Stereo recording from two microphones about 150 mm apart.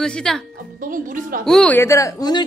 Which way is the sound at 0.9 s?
65° right (ahead or behind).